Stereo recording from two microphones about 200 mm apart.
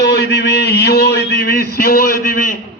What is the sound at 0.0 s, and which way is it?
A man's voice, 55° left (ahead or behind).